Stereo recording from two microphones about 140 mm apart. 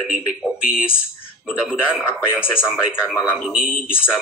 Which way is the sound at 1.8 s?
15° left (ahead or behind).